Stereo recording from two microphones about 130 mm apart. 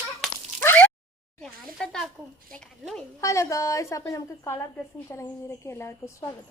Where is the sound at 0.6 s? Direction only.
15° left (ahead or behind).